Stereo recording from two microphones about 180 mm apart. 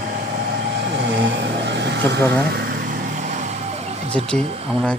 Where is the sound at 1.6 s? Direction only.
70° right (ahead or behind).